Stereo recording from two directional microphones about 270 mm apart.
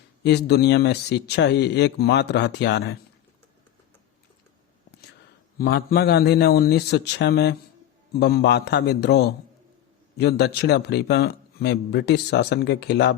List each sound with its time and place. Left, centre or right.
0.2 s a man's voice: left
5.5 s a man's voice: left